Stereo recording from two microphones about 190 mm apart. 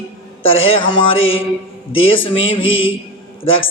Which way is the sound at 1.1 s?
90° left.